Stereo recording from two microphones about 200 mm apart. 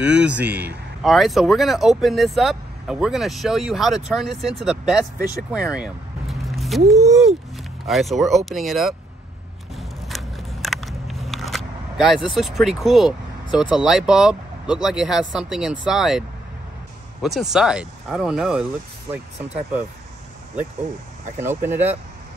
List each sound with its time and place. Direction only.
0.0 s speech: 5° right (ahead or behind)
5.5 s a sound: 5° right (ahead or behind)
6.9 s speech: 15° right (ahead or behind)
7.5 s speech: centre (ahead or behind)
9.8 s a sound: centre (ahead or behind)
12.4 s speech: centre (ahead or behind)
21.4 s speech: 10° right (ahead or behind)